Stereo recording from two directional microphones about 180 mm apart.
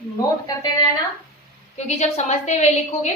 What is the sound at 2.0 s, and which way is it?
A woman's voice, 40° left (ahead or behind).